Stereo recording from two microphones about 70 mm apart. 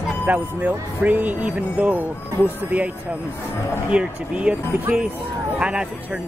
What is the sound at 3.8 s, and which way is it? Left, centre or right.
Speech, centre.